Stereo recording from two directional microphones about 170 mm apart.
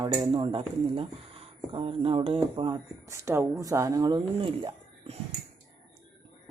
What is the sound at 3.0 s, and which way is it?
Speech, 15° right (ahead or behind).